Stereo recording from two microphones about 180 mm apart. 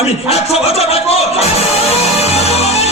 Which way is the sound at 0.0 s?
35° left (ahead or behind).